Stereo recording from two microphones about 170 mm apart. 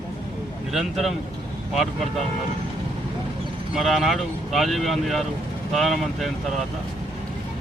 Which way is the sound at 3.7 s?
Centre (ahead or behind).